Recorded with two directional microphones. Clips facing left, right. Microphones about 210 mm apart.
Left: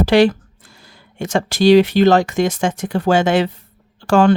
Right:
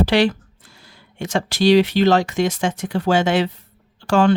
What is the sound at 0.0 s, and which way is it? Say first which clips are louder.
Speech: left 4 dB; 45° left (ahead or behind).